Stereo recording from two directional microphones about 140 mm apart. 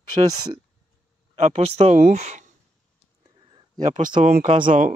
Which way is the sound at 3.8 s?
60° right (ahead or behind).